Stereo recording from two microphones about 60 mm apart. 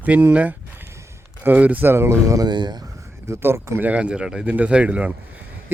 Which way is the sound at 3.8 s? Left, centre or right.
Right.